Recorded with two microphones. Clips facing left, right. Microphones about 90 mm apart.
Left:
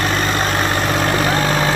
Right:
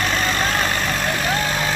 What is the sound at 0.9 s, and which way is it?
Vehicle, 60° left (ahead or behind).